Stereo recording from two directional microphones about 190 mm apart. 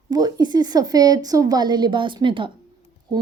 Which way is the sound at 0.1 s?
20° right (ahead or behind).